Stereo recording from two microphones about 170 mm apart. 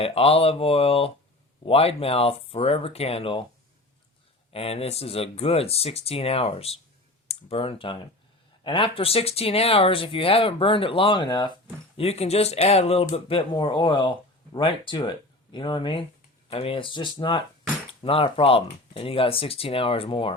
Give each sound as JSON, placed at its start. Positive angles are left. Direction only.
{"t": 0.0, "sound": "speech", "side_deg": 35}
{"t": 4.5, "sound": "speech", "side_deg": 35}
{"t": 11.9, "sound": "speech", "side_deg": 40}